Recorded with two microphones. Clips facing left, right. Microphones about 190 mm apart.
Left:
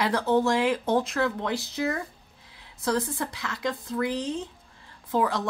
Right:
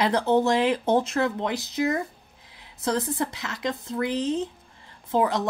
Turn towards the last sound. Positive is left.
turn(degrees=-25)  # may be behind; listen again after turning